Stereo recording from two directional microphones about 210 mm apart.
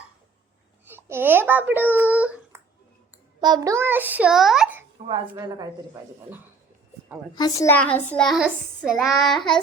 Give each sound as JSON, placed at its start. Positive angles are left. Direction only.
{"t": 0.9, "sound": "a child's voice", "side_deg": -10}
{"t": 3.4, "sound": "a child's voice", "side_deg": -20}
{"t": 4.9, "sound": "a woman's voice", "side_deg": -25}
{"t": 7.3, "sound": "a woman's voice", "side_deg": 15}
{"t": 8.3, "sound": "child singing", "side_deg": -5}